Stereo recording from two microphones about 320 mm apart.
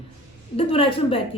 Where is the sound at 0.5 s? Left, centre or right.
Centre.